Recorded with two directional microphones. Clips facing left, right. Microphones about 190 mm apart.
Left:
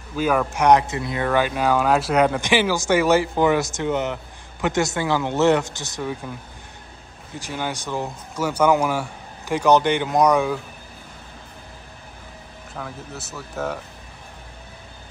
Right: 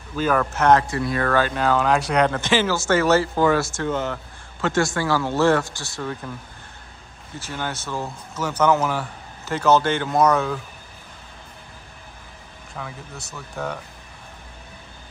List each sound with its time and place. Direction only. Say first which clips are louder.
0.1 s speech: even; 10° left (ahead or behind)
7.3 s speech: left 2 dB; 15° left (ahead or behind)
12.7 s speech: left 2 dB; centre (ahead or behind)